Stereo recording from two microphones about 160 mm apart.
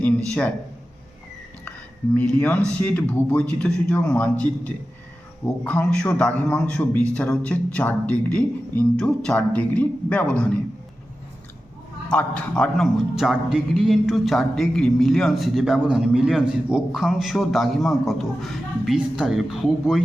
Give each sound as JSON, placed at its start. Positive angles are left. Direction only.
{"t": 0.0, "sound": "a sound", "side_deg": 10}
{"t": 2.1, "sound": "speech", "side_deg": 5}
{"t": 12.1, "sound": "a man's voice", "side_deg": 5}